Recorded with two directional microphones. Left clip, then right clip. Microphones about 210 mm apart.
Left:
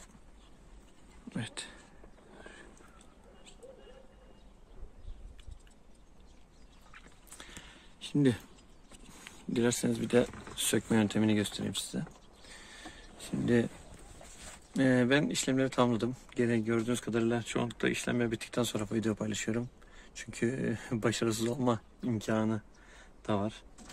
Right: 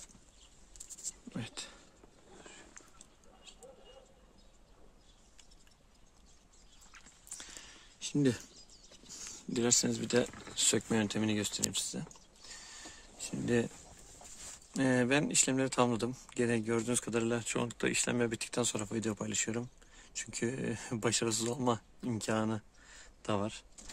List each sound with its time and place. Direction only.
1.3 s speech: 15° right (ahead or behind)
6.9 s a sound: 10° right (ahead or behind)
9.2 s speech: 10° right (ahead or behind)
14.7 s speech: 10° right (ahead or behind)